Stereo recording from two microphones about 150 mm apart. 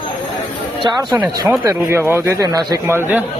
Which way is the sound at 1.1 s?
20° right (ahead or behind).